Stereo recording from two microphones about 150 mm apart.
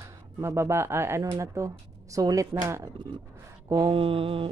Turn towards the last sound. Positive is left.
turn(degrees=-35)  # may be behind; listen again after turning